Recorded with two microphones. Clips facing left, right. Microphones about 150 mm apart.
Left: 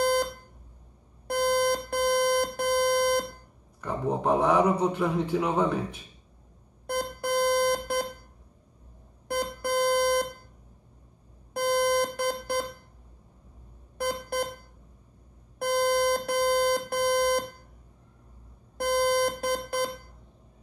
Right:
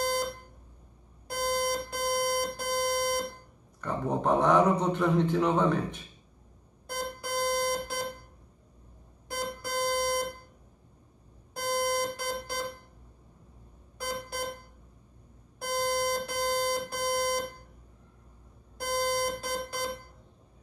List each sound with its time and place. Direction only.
1.2 s alarm clock: 60° left (ahead or behind)
3.8 s a man's voice: 10° left (ahead or behind)
6.9 s alarm: 55° left (ahead or behind)
9.3 s alarm clock: 55° left (ahead or behind)
11.5 s alarm: 60° left (ahead or behind)
13.9 s alarm: 60° left (ahead or behind)
15.6 s alarm clock: 60° left (ahead or behind)
18.8 s alarm: 60° left (ahead or behind)